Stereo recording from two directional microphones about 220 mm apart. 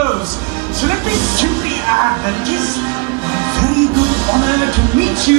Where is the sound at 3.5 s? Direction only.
15° right (ahead or behind).